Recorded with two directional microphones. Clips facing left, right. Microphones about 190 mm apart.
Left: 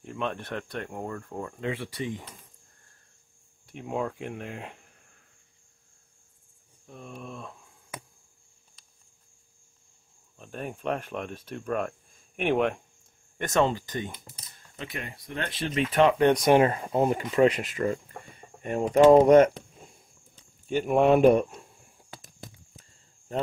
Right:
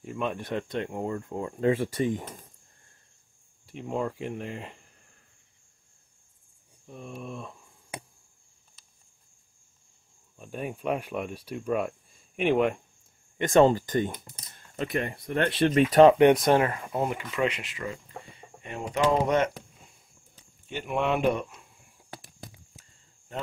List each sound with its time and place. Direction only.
0.0 s speech: 5° right (ahead or behind)
1.6 s speech: 45° right (ahead or behind)
3.6 s speech: centre (ahead or behind)
6.9 s speech: 5° right (ahead or behind)
10.3 s speech: 10° right (ahead or behind)
13.5 s speech: 40° right (ahead or behind); by 15.8 s 60° right (ahead or behind)
15.9 s speech: 35° right (ahead or behind)
16.4 s speech: 25° left (ahead or behind)
17.2 s speech: 40° left (ahead or behind)
20.6 s speech: 40° left (ahead or behind)